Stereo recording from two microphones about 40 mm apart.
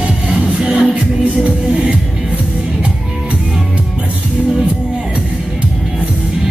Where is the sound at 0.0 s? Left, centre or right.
Right.